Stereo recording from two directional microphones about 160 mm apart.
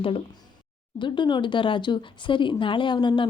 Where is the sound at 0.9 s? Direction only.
30° left (ahead or behind).